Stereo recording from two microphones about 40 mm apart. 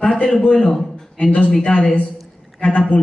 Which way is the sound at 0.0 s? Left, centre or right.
Left.